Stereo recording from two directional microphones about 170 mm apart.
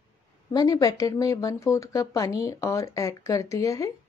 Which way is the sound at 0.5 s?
20° left (ahead or behind).